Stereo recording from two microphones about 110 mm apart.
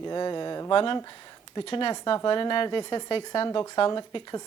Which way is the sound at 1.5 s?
45° left (ahead or behind).